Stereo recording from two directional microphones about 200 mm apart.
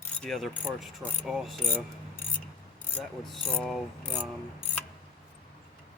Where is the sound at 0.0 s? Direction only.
5° left (ahead or behind).